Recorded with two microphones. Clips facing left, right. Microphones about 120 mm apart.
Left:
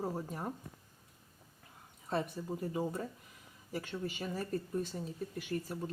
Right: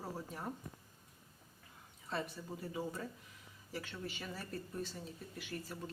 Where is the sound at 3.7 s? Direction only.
45° left (ahead or behind).